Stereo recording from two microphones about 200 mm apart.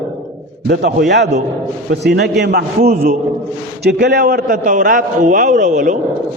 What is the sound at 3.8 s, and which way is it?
A man's voice, 55° right (ahead or behind).